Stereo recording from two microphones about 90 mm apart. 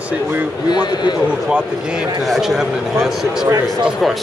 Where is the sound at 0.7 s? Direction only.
50° left (ahead or behind).